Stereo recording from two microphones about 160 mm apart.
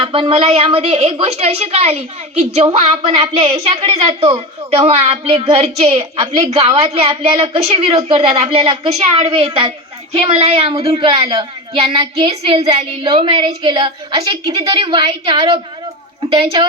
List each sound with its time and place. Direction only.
0.0 s a woman's voice: 35° right (ahead or behind)